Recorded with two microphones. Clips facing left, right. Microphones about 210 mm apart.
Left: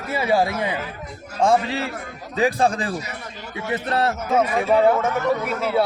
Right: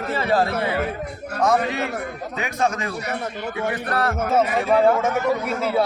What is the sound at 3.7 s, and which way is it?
Speech, 25° left (ahead or behind).